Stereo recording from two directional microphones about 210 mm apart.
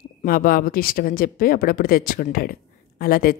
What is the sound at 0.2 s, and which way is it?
A man's voice, 45° left (ahead or behind).